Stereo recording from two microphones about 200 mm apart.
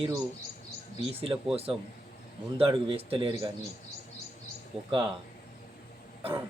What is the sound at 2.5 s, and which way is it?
Speech, 25° right (ahead or behind).